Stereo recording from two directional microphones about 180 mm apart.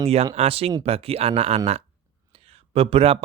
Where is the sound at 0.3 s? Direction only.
35° right (ahead or behind).